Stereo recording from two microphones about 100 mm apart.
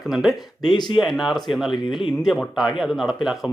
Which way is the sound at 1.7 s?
55° left (ahead or behind).